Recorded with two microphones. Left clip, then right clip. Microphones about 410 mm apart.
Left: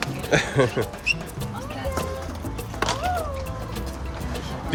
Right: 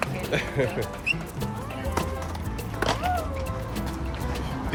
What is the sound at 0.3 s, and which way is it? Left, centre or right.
Speech, centre.